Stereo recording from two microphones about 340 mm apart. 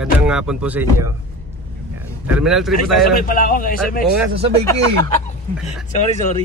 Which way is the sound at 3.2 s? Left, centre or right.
Left.